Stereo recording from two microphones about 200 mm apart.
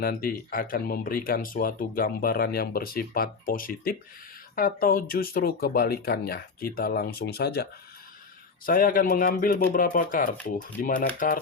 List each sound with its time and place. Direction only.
0.0 s speech: 45° left (ahead or behind)